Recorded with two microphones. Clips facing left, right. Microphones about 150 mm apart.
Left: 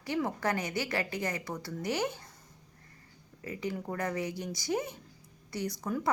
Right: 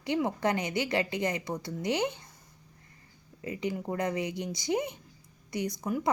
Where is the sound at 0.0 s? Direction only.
20° right (ahead or behind).